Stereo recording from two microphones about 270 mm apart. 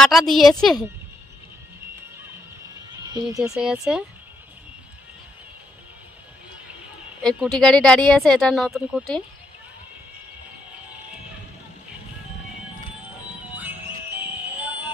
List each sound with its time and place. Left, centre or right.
0.0 s speech: centre
3.4 s speech: centre
7.2 s speech: centre
13.6 s music: centre